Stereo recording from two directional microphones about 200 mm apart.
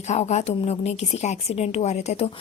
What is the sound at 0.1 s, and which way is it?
A woman's voice, 35° left (ahead or behind).